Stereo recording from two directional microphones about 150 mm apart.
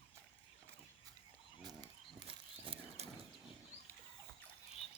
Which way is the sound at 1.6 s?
25° right (ahead or behind).